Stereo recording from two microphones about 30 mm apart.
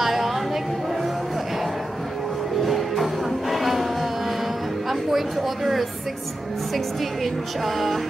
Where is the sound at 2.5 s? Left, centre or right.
Centre.